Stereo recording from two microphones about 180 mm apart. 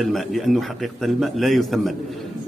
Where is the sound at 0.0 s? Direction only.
Centre (ahead or behind).